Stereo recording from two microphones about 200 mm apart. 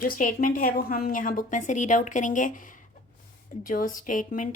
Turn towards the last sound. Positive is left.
turn(degrees=40)  # may be behind; listen again after turning